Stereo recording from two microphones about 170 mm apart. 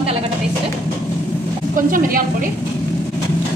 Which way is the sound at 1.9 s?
55° right (ahead or behind).